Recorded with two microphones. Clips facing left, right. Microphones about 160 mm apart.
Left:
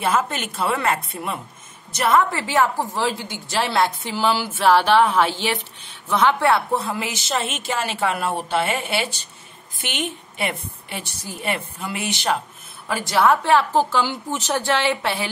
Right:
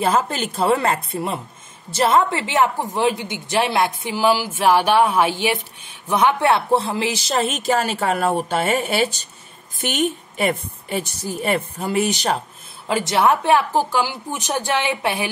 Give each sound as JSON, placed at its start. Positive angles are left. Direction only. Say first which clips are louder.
{"t": 0.0, "sound": "a woman's voice", "louder": "right 2 dB", "side_deg": -30}
{"t": 12.8, "sound": "a woman's voice", "louder": "right 1 dB", "side_deg": -20}